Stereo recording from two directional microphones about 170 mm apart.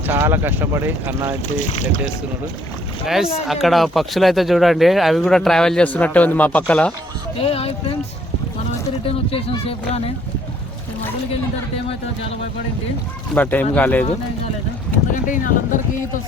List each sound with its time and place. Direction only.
0.1 s speech: 15° right (ahead or behind)
1.7 s speech: 45° left (ahead or behind)
3.4 s speech: centre (ahead or behind)
7.3 s speech: 35° left (ahead or behind)
9.0 s speech: 35° left (ahead or behind)
13.3 s speech: 10° left (ahead or behind)
15.1 s speech: 50° left (ahead or behind)